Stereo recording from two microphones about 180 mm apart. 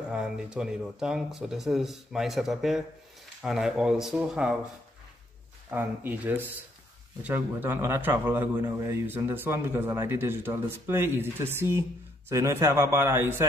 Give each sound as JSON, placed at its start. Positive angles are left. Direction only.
{"t": 0.1, "sound": "speech", "side_deg": -5}
{"t": 5.7, "sound": "a man's voice", "side_deg": -10}